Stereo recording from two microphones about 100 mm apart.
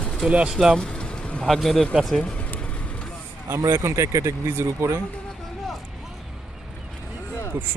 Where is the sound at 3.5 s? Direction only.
30° right (ahead or behind).